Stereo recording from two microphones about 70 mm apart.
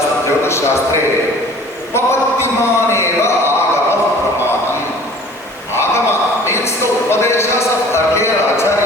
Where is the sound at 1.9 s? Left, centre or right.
Left.